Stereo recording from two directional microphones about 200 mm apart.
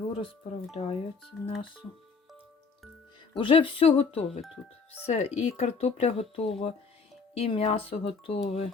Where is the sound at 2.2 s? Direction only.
Centre (ahead or behind).